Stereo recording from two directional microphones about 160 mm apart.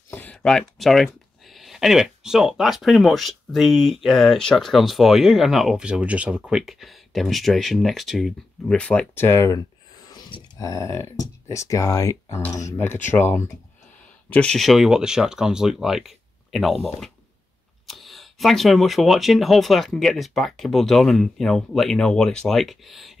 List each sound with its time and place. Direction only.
0.1 s speech: 10° left (ahead or behind)
14.3 s speech: 5° left (ahead or behind)
17.8 s speech: centre (ahead or behind)